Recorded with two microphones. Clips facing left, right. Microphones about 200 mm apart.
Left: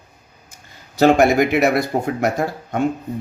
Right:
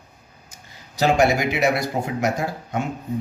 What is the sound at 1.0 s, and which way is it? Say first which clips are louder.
Speech: left 5 dB; 55° left (ahead or behind).